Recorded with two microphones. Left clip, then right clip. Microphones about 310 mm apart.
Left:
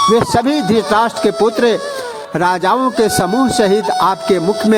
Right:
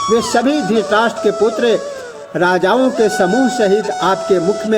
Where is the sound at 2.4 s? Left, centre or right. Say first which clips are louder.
Right 1 dB; left.